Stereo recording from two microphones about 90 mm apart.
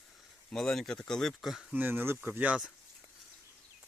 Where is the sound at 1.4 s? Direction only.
5° right (ahead or behind).